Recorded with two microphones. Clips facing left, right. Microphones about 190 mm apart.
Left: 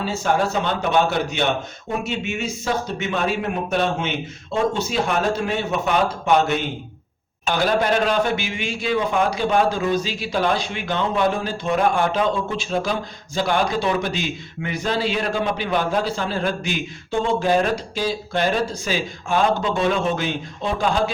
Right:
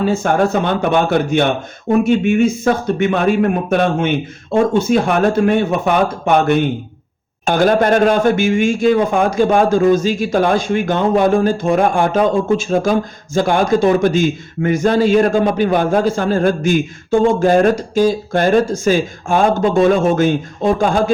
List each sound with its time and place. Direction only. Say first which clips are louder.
0.0 s a man's voice: right 7 dB; 50° right (ahead or behind)